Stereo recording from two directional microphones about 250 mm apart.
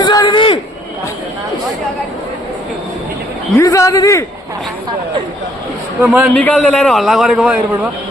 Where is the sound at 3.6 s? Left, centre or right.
Centre.